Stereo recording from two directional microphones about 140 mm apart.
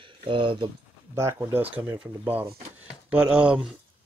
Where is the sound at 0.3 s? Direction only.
35° right (ahead or behind).